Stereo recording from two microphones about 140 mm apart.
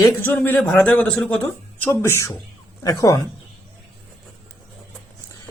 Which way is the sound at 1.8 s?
20° left (ahead or behind).